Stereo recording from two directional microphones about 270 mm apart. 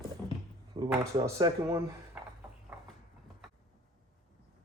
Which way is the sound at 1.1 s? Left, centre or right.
Centre.